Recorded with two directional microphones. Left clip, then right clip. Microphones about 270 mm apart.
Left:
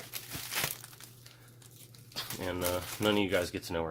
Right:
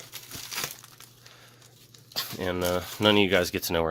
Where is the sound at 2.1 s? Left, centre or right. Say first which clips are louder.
Right 7 dB; right.